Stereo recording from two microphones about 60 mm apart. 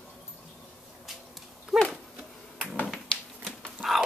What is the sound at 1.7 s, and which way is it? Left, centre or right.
Dog, centre.